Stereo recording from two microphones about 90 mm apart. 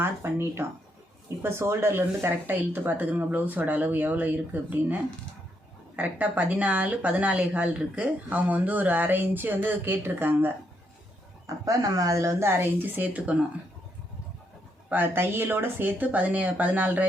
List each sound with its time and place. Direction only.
0.0 s speech: 25° right (ahead or behind)
6.0 s speech: 20° right (ahead or behind)
11.4 s speech: 40° right (ahead or behind); by 13.4 s 15° right (ahead or behind)
14.8 s speech: 20° right (ahead or behind)